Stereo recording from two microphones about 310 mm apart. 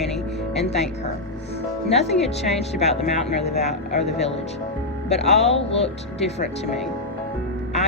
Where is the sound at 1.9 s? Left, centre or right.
Left.